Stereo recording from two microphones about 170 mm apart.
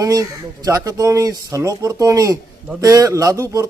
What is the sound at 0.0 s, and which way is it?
A man's voice, 20° right (ahead or behind).